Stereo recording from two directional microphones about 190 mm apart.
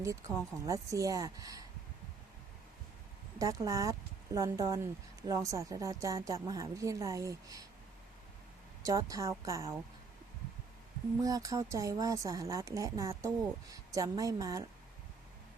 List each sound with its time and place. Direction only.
0.0 s speech: 15° right (ahead or behind)
3.3 s speech: 15° right (ahead or behind)
8.8 s speech: 20° right (ahead or behind)
11.2 s speech: 15° right (ahead or behind)